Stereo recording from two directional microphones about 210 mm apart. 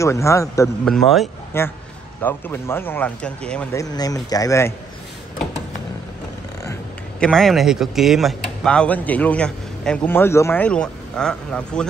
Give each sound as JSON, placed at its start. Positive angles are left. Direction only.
{"t": 0.0, "sound": "speech", "side_deg": 15}
{"t": 0.8, "sound": "a man's voice", "side_deg": 0}
{"t": 1.5, "sound": "speech", "side_deg": 10}
{"t": 3.8, "sound": "speech", "side_deg": 15}
{"t": 6.6, "sound": "speech", "side_deg": 10}